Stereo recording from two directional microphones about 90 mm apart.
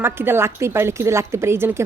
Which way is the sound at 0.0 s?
25° right (ahead or behind).